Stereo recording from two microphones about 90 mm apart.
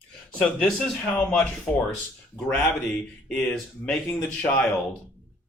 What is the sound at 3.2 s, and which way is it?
Speech, 15° left (ahead or behind).